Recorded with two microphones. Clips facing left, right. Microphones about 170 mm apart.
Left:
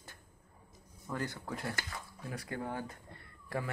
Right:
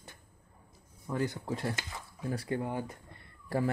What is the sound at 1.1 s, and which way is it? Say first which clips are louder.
A man's voice: right 5 dB; 20° right (ahead or behind).